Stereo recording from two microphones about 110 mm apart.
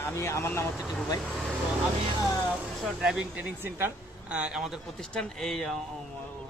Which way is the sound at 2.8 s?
5° right (ahead or behind).